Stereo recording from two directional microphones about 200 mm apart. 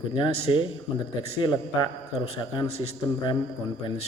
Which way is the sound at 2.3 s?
30° left (ahead or behind).